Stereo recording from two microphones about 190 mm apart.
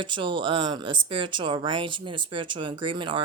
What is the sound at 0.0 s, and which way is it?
Speech, 25° right (ahead or behind).